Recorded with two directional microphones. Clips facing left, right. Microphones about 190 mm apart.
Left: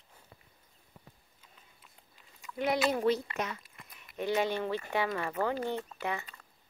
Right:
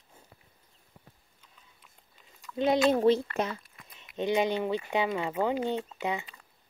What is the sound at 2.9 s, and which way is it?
Speech, 25° right (ahead or behind).